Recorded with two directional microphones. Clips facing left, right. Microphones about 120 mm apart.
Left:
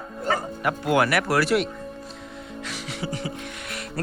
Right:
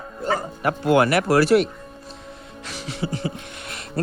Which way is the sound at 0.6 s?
25° right (ahead or behind).